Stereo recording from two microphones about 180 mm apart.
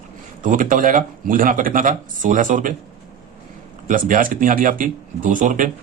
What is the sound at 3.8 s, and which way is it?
Speech, 50° right (ahead or behind).